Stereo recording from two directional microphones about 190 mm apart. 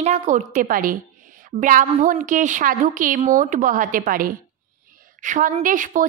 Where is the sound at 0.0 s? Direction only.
40° right (ahead or behind).